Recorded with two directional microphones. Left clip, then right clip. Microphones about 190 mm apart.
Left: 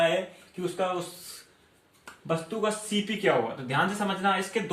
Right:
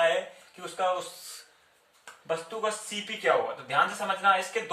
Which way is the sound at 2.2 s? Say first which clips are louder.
Left 2 dB; 10° right (ahead or behind).